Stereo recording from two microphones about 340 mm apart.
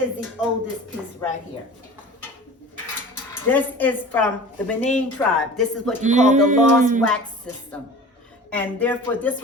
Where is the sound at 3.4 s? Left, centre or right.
Centre.